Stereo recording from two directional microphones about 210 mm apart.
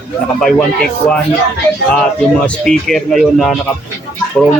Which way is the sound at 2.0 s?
5° left (ahead or behind).